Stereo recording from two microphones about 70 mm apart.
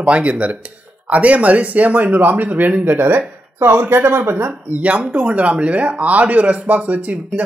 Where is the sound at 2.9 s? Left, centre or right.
Right.